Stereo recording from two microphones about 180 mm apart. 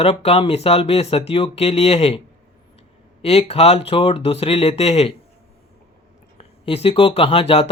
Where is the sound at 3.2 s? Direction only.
35° left (ahead or behind).